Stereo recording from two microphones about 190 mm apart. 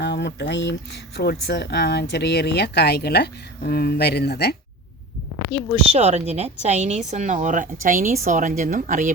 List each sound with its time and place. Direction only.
0.0 s speech: 65° left (ahead or behind)
5.9 s a woman's voice: 35° right (ahead or behind)